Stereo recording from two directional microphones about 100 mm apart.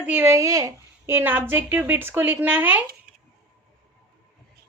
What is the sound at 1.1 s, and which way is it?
A woman's voice, 20° right (ahead or behind).